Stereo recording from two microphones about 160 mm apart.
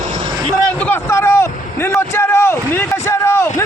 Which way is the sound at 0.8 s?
15° left (ahead or behind).